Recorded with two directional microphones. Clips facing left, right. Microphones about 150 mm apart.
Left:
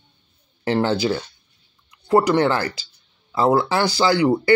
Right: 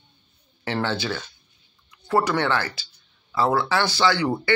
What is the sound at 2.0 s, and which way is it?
Speech, 20° left (ahead or behind).